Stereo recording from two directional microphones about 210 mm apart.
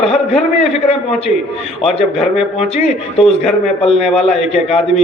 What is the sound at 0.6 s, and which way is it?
A man's voice, 30° left (ahead or behind).